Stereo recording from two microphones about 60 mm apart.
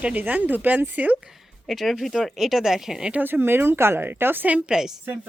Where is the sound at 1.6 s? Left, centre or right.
Centre.